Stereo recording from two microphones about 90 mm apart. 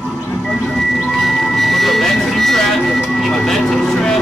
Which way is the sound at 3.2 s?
5° left (ahead or behind).